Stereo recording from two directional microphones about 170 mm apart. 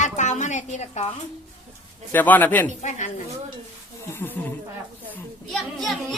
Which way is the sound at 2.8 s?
45° left (ahead or behind).